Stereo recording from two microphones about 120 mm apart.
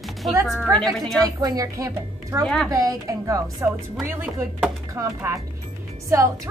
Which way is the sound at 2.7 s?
30° right (ahead or behind).